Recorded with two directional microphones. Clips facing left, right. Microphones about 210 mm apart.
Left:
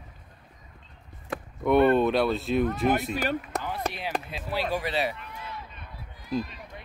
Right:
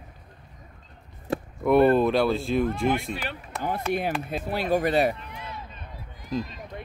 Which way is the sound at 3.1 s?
45° left (ahead or behind).